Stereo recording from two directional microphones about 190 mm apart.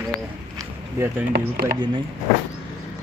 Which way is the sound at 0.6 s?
15° right (ahead or behind).